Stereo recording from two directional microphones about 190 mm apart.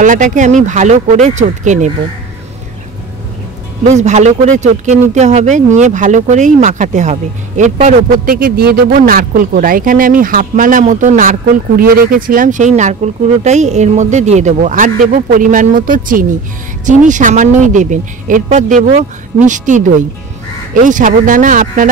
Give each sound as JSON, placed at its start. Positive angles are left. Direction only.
{"t": 0.0, "sound": "speech", "side_deg": -40}
{"t": 3.8, "sound": "speech", "side_deg": -40}